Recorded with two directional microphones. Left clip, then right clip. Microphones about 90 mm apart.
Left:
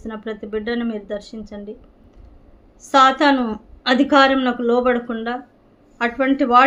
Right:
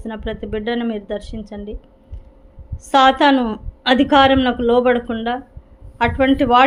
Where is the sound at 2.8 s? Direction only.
45° right (ahead or behind).